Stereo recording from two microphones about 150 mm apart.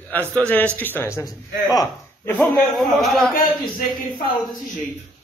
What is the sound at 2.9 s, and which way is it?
Speech, centre (ahead or behind).